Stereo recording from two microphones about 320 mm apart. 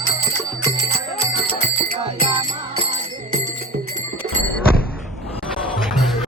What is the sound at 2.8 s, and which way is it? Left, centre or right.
Music, centre.